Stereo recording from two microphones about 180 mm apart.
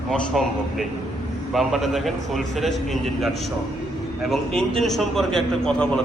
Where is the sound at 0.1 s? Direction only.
Centre (ahead or behind).